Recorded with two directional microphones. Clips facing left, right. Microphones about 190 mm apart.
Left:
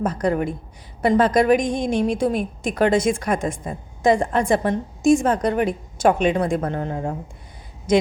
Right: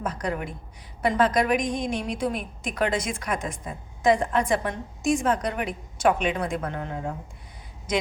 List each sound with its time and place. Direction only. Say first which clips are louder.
0.0 s a woman's voice: left 8 dB; 30° left (ahead or behind)